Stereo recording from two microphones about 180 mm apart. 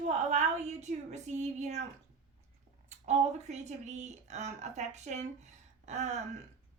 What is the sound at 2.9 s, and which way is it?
A woman's voice, 40° right (ahead or behind).